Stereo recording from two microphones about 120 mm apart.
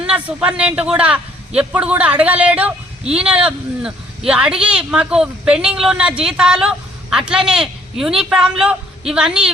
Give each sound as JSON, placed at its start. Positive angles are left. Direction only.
{"t": 0.0, "sound": "a man's voice", "side_deg": -10}